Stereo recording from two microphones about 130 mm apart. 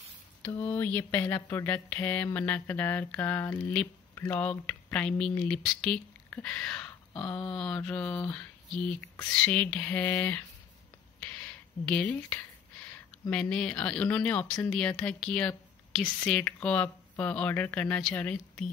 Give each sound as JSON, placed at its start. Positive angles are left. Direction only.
{"t": 0.5, "sound": "speech", "side_deg": 15}
{"t": 11.1, "sound": "a sound", "side_deg": 10}
{"t": 13.3, "sound": "speech", "side_deg": 5}